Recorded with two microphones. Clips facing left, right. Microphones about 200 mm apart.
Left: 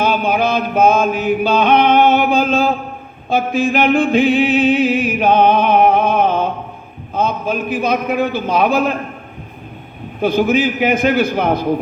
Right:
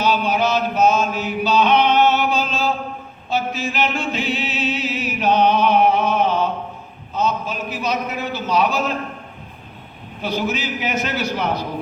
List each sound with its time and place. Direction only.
0.0 s chant: 55° left (ahead or behind)
3.2 s a sound: 55° left (ahead or behind)
7.1 s a man's voice: 55° left (ahead or behind)
10.2 s a man's voice: 55° left (ahead or behind)